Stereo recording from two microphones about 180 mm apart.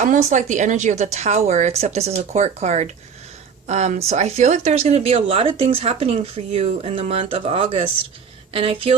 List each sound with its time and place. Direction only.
0.0 s speech: 40° right (ahead or behind)